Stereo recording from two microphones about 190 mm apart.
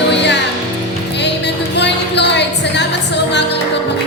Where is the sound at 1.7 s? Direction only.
65° left (ahead or behind).